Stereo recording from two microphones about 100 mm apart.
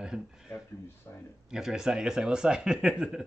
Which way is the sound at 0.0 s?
5° right (ahead or behind).